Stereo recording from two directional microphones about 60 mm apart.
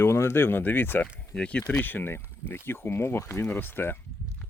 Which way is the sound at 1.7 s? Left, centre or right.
Left.